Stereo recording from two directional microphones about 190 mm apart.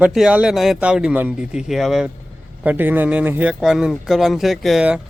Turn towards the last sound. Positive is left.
turn(degrees=-5)  # may be behind; listen again after turning